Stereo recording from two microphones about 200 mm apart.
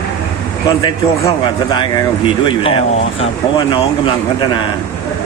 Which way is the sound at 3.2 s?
25° left (ahead or behind).